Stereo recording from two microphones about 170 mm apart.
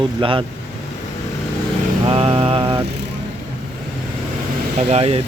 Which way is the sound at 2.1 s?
35° right (ahead or behind).